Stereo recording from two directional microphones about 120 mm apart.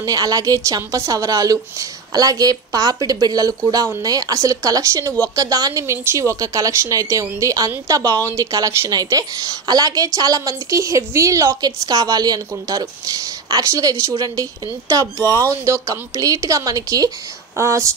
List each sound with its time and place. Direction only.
0.0 s a woman's voice: 30° right (ahead or behind)